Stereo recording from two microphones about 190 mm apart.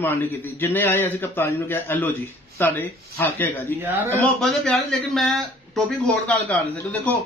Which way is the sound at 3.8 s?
10° right (ahead or behind).